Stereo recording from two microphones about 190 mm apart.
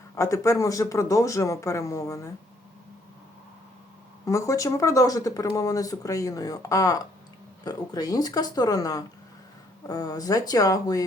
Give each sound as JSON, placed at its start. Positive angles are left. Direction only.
{"t": 0.2, "sound": "speech", "side_deg": 15}
{"t": 4.3, "sound": "speech", "side_deg": 15}